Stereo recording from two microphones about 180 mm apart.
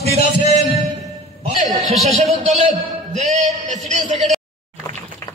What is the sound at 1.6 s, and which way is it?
A man's voice, 40° right (ahead or behind).